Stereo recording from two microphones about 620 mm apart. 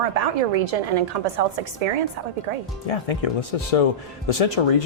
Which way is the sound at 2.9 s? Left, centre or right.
Left.